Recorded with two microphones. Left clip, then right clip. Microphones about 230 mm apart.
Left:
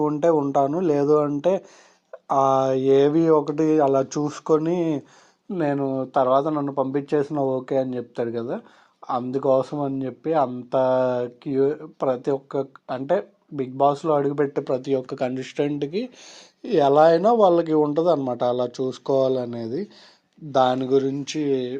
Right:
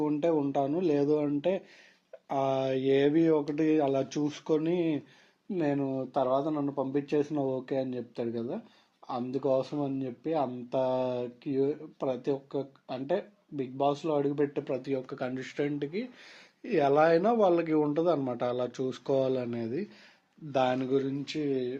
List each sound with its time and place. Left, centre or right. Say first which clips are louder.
0.0 s speech: left 8 dB; left
20.6 s a man's voice: left 9 dB; left